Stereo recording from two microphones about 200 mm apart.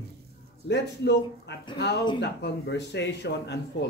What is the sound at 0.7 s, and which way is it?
Speech, 60° left (ahead or behind).